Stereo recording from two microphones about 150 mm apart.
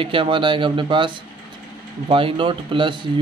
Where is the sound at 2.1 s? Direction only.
35° right (ahead or behind).